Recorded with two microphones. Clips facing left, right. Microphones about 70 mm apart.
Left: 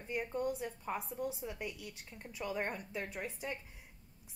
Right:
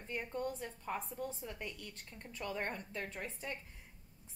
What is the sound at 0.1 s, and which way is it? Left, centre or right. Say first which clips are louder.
A woman's voice: left 3 dB; centre.